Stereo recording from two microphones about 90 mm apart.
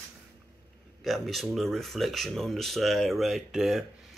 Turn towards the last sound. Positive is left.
turn(degrees=-5)  # may be behind; listen again after turning